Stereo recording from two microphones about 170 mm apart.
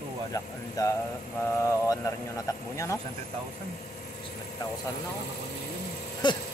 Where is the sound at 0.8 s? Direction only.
20° left (ahead or behind).